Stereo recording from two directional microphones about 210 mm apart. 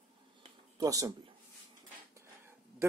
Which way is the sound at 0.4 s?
15° right (ahead or behind).